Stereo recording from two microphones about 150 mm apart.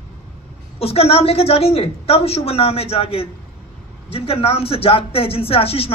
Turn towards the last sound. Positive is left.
turn(degrees=40)  # may be behind; listen again after turning